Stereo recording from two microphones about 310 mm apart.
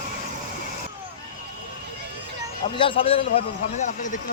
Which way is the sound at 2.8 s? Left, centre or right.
Centre.